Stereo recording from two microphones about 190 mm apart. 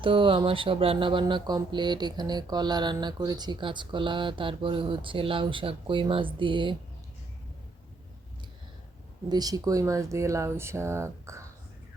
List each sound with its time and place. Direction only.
0.0 s speech: 25° right (ahead or behind)
9.3 s speech: 20° right (ahead or behind)